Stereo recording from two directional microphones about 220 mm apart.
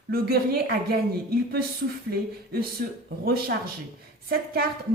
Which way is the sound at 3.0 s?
45° right (ahead or behind).